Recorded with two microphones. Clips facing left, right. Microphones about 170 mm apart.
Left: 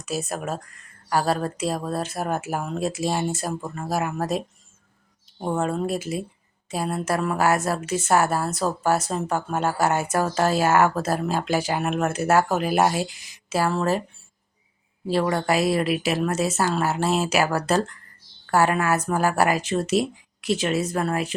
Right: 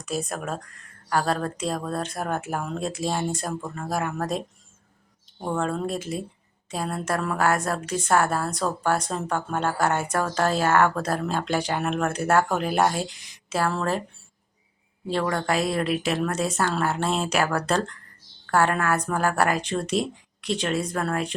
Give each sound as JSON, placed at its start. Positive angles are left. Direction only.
{"t": 0.0, "sound": "a woman's voice", "side_deg": 5}
{"t": 15.0, "sound": "a woman's voice", "side_deg": 5}